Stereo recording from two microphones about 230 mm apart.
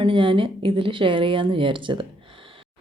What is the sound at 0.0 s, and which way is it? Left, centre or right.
Speech, right.